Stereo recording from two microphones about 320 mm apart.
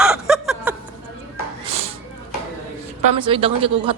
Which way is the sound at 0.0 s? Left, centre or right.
Centre.